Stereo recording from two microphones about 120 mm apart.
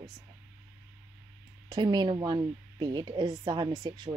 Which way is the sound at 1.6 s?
40° right (ahead or behind).